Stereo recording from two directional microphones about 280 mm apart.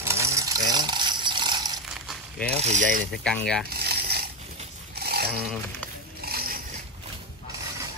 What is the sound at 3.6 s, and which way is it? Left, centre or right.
Mechanisms, right.